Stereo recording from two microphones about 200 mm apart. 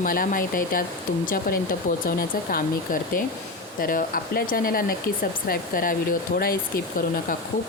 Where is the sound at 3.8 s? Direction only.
45° left (ahead or behind).